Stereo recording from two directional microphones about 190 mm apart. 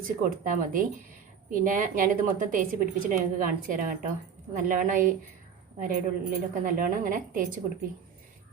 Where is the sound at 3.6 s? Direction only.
45° right (ahead or behind).